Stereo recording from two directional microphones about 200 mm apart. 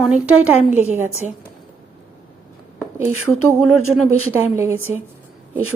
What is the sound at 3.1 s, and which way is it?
Speech, 90° right.